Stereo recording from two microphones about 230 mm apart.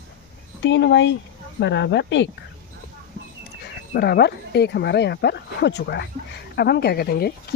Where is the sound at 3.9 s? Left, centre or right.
Left.